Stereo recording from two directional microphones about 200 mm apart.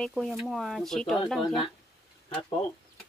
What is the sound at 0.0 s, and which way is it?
Speech, centre (ahead or behind).